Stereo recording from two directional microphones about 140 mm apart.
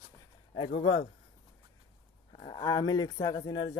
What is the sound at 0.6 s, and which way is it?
Speech, 45° left (ahead or behind).